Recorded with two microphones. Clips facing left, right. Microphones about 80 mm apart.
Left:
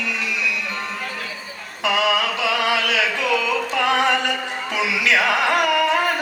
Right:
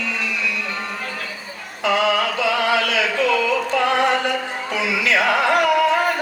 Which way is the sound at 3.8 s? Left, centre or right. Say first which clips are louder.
Even; centre.